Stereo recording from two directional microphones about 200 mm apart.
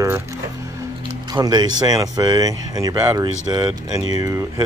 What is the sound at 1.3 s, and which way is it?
Speech, 20° right (ahead or behind).